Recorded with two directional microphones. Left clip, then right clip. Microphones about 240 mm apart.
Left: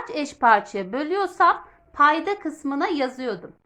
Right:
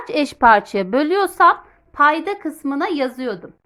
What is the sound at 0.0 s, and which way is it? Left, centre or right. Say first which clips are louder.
A woman's voice: right 6 dB; right.